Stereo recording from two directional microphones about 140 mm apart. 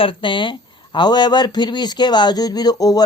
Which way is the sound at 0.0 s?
40° left (ahead or behind).